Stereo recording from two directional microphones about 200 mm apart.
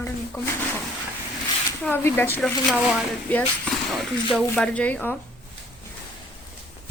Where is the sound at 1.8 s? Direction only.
10° left (ahead or behind).